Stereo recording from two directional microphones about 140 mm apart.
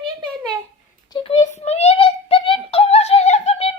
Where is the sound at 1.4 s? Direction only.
55° left (ahead or behind).